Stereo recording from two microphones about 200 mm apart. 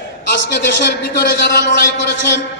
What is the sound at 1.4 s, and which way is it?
A man's voice, 60° left (ahead or behind).